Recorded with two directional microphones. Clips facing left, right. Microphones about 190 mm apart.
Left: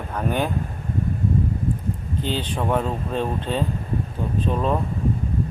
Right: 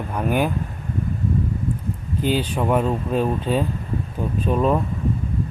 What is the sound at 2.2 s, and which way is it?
Speech, 10° right (ahead or behind).